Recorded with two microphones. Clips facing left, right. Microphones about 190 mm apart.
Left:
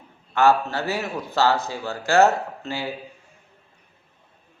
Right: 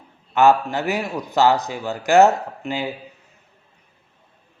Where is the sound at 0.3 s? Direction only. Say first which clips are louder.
Right 3 dB; 15° right (ahead or behind).